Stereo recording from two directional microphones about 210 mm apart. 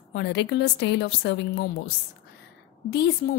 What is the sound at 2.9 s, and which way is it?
Speech, 50° left (ahead or behind).